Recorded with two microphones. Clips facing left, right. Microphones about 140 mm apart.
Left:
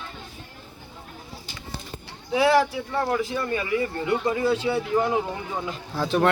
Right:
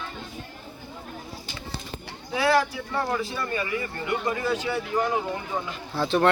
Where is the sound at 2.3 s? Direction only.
20° left (ahead or behind).